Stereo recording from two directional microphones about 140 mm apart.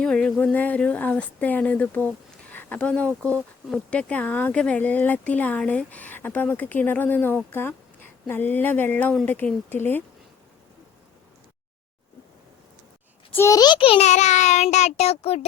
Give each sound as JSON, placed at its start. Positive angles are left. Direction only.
{"t": 0.0, "sound": "speech", "side_deg": 5}
{"t": 13.3, "sound": "a child's voice", "side_deg": 20}
{"t": 14.1, "sound": "child singing", "side_deg": 55}